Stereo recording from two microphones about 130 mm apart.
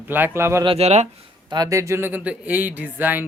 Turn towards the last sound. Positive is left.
turn(degrees=-15)  # may be behind; listen again after turning